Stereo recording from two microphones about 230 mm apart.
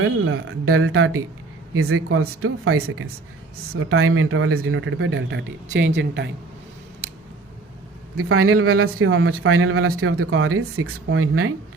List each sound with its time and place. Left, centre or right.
0.0 s a woman's voice: right
7.0 s scissors: right
8.1 s speech: right